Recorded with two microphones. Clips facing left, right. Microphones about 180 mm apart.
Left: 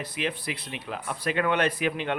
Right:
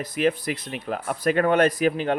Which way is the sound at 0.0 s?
45° right (ahead or behind).